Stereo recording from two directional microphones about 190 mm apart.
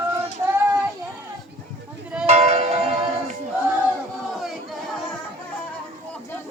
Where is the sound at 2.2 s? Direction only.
35° right (ahead or behind).